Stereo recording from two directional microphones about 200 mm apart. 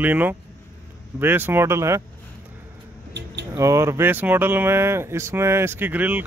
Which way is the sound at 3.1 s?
60° right (ahead or behind).